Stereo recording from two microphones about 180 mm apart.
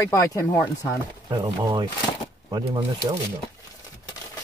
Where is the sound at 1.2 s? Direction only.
20° right (ahead or behind).